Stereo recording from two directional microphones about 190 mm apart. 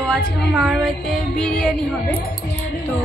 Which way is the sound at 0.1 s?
Centre (ahead or behind).